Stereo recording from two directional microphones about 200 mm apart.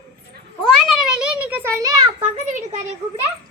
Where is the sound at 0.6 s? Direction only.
5° right (ahead or behind).